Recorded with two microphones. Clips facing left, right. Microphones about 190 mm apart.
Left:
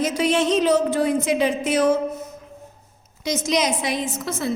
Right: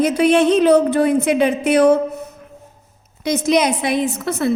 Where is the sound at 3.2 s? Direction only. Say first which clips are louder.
Right 6 dB; 60° right (ahead or behind).